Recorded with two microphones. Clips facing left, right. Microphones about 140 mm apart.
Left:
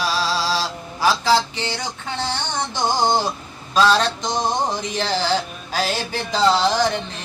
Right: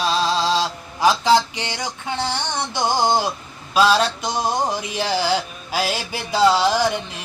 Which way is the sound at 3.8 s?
10° right (ahead or behind).